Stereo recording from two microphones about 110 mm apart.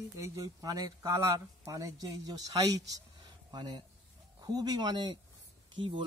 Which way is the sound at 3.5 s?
45° right (ahead or behind).